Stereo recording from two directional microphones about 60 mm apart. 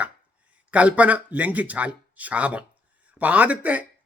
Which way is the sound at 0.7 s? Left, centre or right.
Right.